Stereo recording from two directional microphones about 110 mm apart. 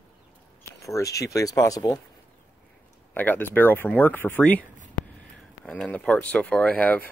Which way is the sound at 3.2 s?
15° left (ahead or behind).